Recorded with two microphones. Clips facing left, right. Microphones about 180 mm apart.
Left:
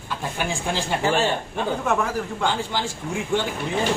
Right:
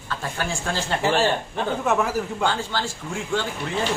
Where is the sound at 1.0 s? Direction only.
Centre (ahead or behind).